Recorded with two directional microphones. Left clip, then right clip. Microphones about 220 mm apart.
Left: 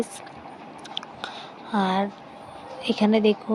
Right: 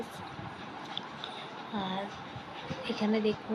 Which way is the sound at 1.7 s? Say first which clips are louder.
Left 13 dB; 45° left (ahead or behind).